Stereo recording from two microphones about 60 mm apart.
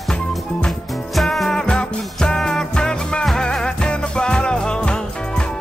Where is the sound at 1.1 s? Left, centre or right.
Centre.